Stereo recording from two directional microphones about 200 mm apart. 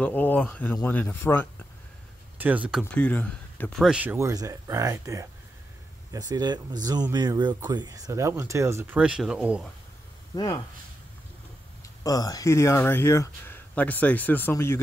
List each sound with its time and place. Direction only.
0.0 s speech: 10° left (ahead or behind)
2.3 s speech: 10° right (ahead or behind)
2.8 s speech: 5° left (ahead or behind)
3.8 s speech: 5° right (ahead or behind)
10.3 s speech: 20° left (ahead or behind)
12.0 s speech: 20° left (ahead or behind)